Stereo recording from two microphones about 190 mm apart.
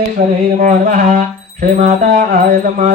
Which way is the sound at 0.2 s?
45° right (ahead or behind).